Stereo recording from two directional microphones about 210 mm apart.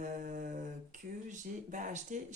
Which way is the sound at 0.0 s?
35° right (ahead or behind).